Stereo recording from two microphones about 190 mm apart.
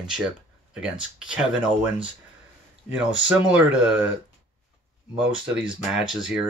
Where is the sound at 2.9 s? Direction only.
5° right (ahead or behind).